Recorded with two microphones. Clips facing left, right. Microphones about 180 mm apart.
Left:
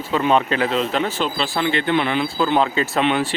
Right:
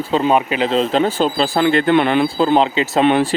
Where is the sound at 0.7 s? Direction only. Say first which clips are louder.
Right 5 dB; 30° right (ahead or behind); by 2.2 s 55° right (ahead or behind).